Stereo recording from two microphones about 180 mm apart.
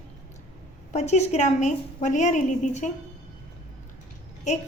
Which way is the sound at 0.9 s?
40° left (ahead or behind).